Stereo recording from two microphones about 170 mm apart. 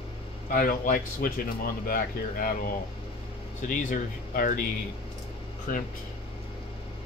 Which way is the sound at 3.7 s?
50° left (ahead or behind).